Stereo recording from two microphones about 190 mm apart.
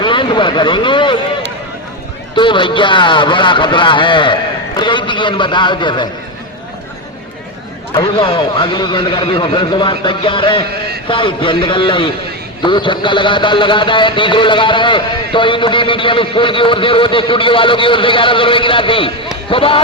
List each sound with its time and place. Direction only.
0.0 s speech: 25° left (ahead or behind)
2.3 s a man's voice: 25° left (ahead or behind)
7.9 s a man's voice: 25° left (ahead or behind)